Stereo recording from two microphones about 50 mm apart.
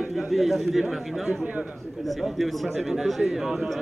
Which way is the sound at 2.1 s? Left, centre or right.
Centre.